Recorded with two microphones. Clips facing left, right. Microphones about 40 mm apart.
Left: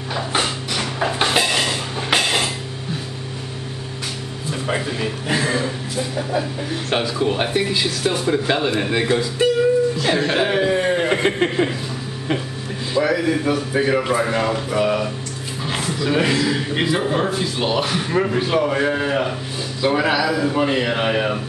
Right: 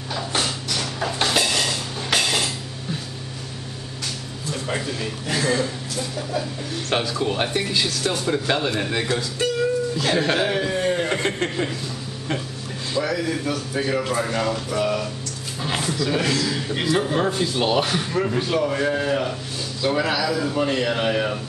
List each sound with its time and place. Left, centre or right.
0.1 s a sound: left
4.5 s a man's voice: centre
6.9 s speech: centre
10.4 s chuckle: centre
12.9 s speech: centre
15.6 s a sound: centre
16.0 s speech: left
18.1 s speech: centre